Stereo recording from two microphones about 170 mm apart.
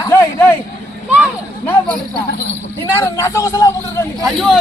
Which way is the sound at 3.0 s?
15° left (ahead or behind).